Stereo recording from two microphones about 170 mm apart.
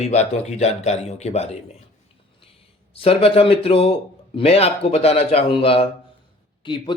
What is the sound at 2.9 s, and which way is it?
A man's voice, 35° left (ahead or behind).